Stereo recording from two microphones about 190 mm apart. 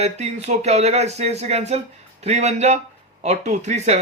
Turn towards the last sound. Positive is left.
turn(degrees=-35)  # may be behind; listen again after turning